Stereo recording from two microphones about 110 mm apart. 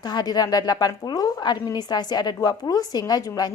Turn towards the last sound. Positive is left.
turn(degrees=35)  # may be behind; listen again after turning